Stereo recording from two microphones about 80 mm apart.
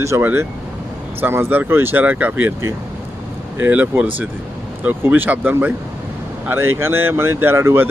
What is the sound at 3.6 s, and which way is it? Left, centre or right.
Speech, centre.